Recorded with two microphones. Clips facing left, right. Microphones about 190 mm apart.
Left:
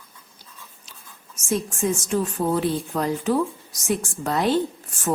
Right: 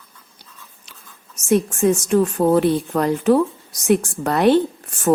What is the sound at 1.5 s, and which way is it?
Speech, 65° right (ahead or behind).